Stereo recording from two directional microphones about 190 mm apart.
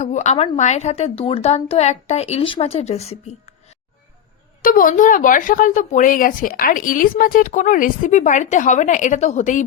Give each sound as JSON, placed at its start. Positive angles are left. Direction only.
{"t": 0.0, "sound": "a woman's voice", "side_deg": 40}
{"t": 4.6, "sound": "speech", "side_deg": 45}